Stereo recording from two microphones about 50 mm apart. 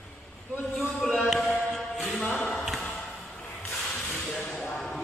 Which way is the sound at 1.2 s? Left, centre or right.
Centre.